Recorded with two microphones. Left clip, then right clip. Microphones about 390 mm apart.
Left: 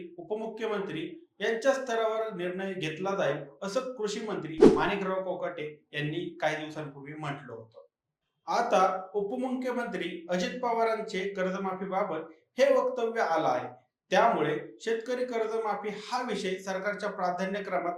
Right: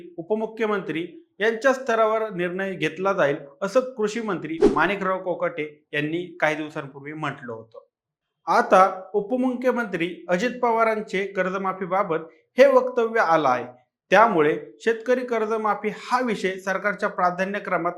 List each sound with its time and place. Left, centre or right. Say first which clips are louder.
0.3 s speech: right 9 dB; right
4.5 s speech: even; centre
4.8 s speech: right 7 dB; right